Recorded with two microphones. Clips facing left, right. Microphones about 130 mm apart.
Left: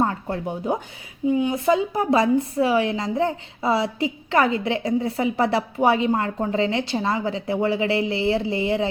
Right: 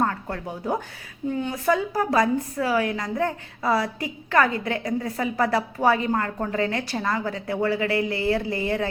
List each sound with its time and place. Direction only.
0.0 s a woman's voice: 25° left (ahead or behind)